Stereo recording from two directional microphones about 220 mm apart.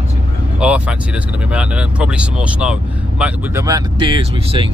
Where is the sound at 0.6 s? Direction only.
5° right (ahead or behind).